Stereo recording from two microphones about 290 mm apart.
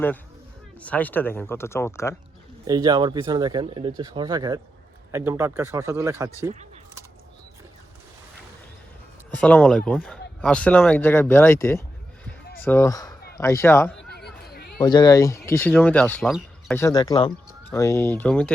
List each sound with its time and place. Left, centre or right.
0.8 s speech: centre
2.6 s speech: centre
9.4 s speech: centre
14.1 s a sound: left
14.8 s speech: centre